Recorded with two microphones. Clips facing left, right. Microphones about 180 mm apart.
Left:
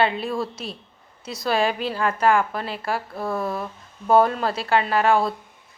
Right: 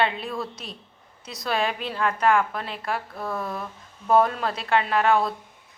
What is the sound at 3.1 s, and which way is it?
Speech, 25° left (ahead or behind).